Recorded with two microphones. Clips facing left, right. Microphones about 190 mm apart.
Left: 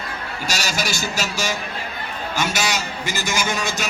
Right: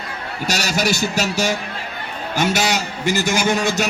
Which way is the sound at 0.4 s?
60° right (ahead or behind).